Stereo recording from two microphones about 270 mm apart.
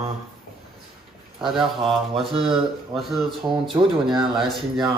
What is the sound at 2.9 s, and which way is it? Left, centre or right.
Speech, centre.